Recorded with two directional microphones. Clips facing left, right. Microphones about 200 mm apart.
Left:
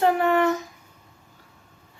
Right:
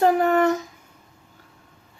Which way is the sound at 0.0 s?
40° right (ahead or behind).